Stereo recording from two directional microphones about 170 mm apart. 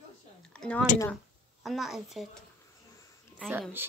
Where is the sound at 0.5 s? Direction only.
5° left (ahead or behind).